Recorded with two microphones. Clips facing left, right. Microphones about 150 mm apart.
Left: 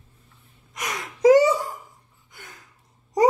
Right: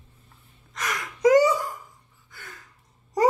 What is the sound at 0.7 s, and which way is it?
Gasp, 20° left (ahead or behind).